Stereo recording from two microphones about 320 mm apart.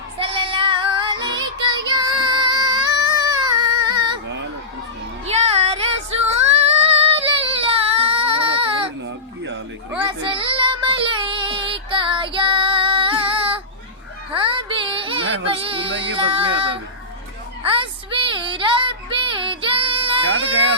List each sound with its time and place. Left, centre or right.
0.2 s child singing: centre
2.0 s a sound: centre
5.2 s music: centre
6.5 s child singing: centre
9.0 s a sound: right
10.1 s child singing: centre
14.3 s music: centre
15.9 s a sound: right
16.1 s music: centre
20.2 s baby cry: right